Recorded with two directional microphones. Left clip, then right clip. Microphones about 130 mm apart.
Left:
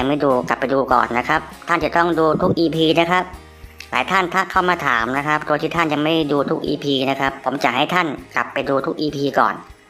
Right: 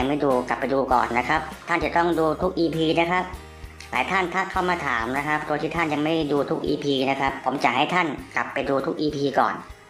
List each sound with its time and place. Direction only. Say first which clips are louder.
0.0 s speech: left 5 dB; 35° left (ahead or behind)